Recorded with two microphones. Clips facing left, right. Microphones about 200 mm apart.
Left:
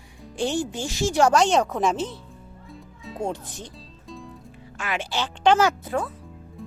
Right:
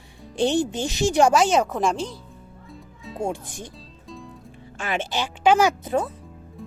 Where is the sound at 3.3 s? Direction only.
10° right (ahead or behind).